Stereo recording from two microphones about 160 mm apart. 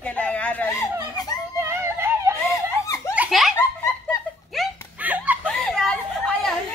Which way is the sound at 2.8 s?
20° left (ahead or behind).